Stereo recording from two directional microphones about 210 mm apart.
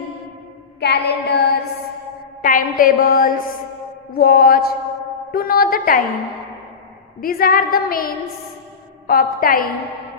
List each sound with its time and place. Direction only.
0.8 s child singing: 50° left (ahead or behind)
2.4 s a woman's voice: 40° left (ahead or behind)
7.2 s a woman's voice: 45° left (ahead or behind)